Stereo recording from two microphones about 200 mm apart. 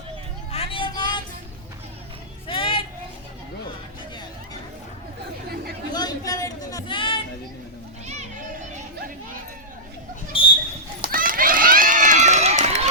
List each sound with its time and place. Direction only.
0.5 s vehicle: 30° left (ahead or behind)
2.5 s a sound: 25° left (ahead or behind)
5.9 s chatter: 20° left (ahead or behind)
11.0 s run: 45° right (ahead or behind)